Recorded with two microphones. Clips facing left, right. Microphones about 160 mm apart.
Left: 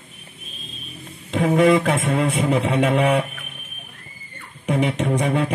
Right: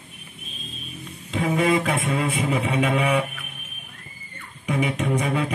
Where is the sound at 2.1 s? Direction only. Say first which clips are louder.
Left 4 dB; 70° left (ahead or behind).